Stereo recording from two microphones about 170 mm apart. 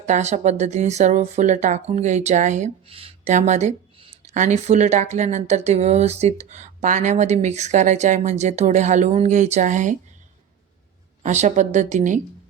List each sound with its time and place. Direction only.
0.1 s speech: 40° right (ahead or behind)
11.2 s speech: 45° right (ahead or behind)